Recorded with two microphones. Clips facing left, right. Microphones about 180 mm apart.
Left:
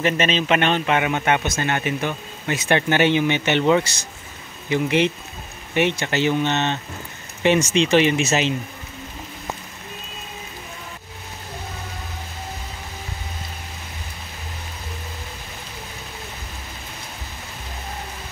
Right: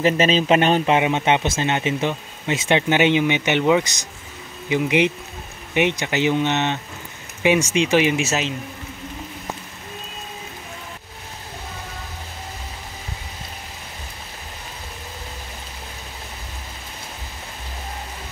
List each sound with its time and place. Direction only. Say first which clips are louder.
0.0 s speech: right 3 dB; 35° right (ahead or behind); by 8.5 s centre (ahead or behind)